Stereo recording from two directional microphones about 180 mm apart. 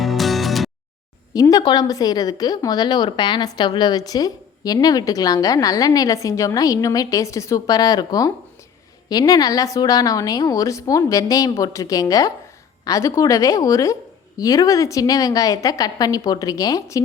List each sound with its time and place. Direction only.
0.0 s music: centre (ahead or behind)
1.3 s a woman's voice: 20° left (ahead or behind)